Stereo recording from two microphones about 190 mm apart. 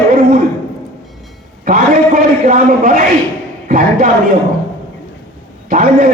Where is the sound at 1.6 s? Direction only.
45° right (ahead or behind).